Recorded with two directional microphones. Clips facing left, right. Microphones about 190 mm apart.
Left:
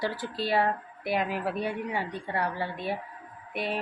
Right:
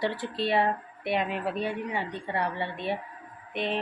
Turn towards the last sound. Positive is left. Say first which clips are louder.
# right 2 dB
turn(degrees=10)  # may be behind; listen again after turning